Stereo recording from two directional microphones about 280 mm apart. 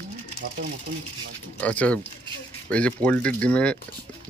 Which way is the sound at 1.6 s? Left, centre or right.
Centre.